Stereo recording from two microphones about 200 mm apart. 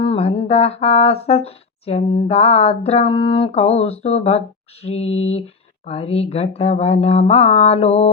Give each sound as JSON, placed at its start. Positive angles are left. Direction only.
{"t": 0.0, "sound": "speech", "side_deg": 30}